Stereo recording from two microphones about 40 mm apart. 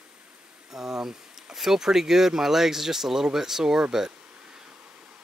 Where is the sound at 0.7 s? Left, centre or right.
Centre.